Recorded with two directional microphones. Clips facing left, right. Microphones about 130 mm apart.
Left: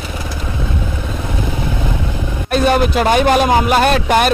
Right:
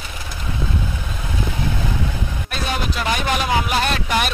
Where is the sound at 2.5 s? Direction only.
50° left (ahead or behind).